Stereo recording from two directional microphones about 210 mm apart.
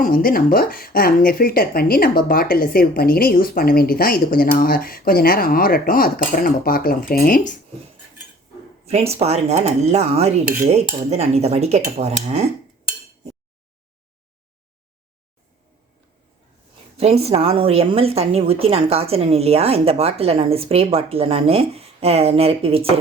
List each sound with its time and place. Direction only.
0.0 s speech: 40° left (ahead or behind)
8.9 s speech: 30° right (ahead or behind)
17.0 s a woman's voice: 30° right (ahead or behind)